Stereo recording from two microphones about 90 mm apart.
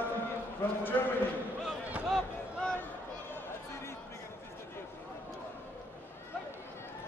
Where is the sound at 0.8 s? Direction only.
20° left (ahead or behind).